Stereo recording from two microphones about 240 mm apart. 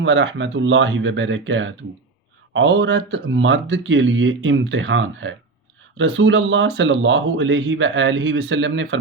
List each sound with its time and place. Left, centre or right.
0.0 s speech: right